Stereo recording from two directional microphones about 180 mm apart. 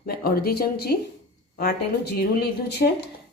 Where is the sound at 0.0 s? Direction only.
55° left (ahead or behind).